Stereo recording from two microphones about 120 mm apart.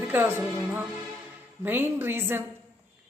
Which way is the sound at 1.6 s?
20° right (ahead or behind).